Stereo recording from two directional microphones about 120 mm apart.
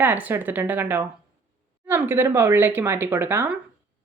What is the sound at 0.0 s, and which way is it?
Speech, 15° right (ahead or behind).